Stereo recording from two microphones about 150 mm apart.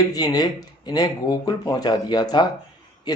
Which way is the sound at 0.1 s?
25° left (ahead or behind).